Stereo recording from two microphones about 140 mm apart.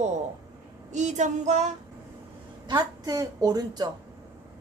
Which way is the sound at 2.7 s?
25° right (ahead or behind).